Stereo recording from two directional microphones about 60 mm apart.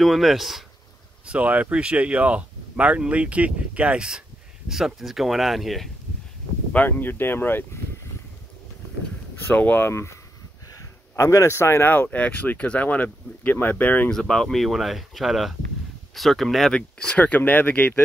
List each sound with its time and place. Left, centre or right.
0.0 s speech: centre
1.2 s speech: right
4.6 s speech: centre
6.9 s speech: left
9.5 s speech: left
9.8 s speech: left
10.7 s a sound: left
11.9 s speech: left
14.1 s speech: centre
16.7 s speech: centre